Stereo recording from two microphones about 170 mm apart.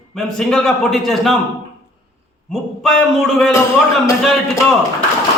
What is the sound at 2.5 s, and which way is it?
A man's voice, centre (ahead or behind).